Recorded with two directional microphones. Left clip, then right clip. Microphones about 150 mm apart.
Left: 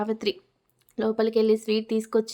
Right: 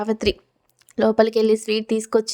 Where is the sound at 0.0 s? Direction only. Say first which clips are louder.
Right 5 dB; 40° right (ahead or behind).